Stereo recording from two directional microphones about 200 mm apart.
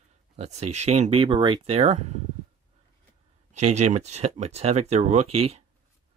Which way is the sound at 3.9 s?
35° right (ahead or behind).